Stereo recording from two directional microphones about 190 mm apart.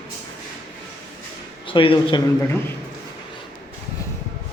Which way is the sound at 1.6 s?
25° left (ahead or behind).